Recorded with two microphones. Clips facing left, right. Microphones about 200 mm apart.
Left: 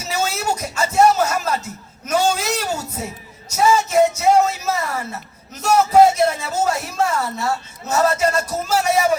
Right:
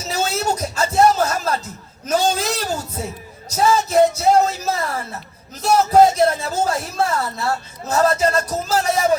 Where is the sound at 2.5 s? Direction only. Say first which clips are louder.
Left 1 dB; 10° left (ahead or behind).